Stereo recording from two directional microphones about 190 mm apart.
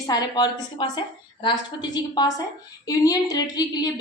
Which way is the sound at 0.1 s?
20° left (ahead or behind).